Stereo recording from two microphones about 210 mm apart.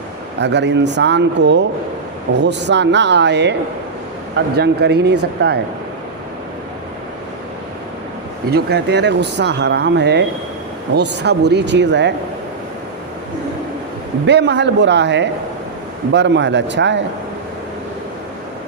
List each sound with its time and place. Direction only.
0.3 s speech: 55° right (ahead or behind)
4.5 s speech: 50° right (ahead or behind)
8.4 s speech: 50° right (ahead or behind)
14.3 s speech: 55° right (ahead or behind)